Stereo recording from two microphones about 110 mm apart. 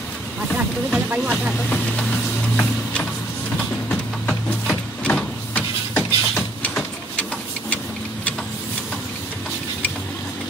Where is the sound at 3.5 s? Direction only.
10° left (ahead or behind).